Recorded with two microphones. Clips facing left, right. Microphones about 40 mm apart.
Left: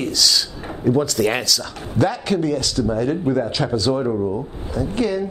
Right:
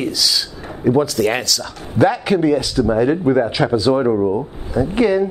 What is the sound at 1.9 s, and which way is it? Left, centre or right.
A man's voice, centre.